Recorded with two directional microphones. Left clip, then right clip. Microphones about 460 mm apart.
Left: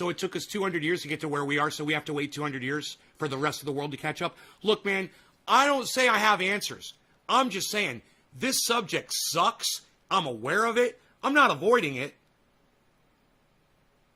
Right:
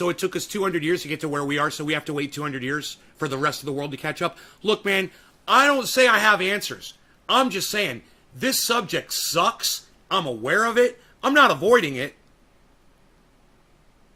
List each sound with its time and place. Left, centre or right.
0.0 s speech: centre